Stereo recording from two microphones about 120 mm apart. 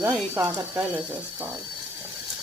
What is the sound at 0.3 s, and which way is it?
Frying, 20° right (ahead or behind).